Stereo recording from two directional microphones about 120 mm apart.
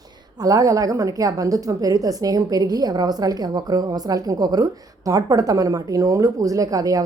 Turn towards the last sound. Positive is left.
turn(degrees=-30)  # may be behind; listen again after turning